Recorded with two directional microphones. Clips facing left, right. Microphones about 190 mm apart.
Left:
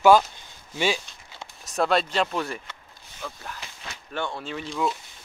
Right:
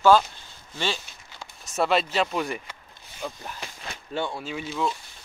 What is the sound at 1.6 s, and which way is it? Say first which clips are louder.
Speech: even; 5° right (ahead or behind).